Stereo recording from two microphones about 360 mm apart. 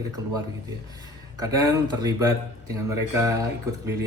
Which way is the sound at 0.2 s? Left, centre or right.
Centre.